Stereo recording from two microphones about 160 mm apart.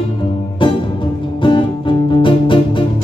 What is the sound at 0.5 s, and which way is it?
Music, 30° left (ahead or behind).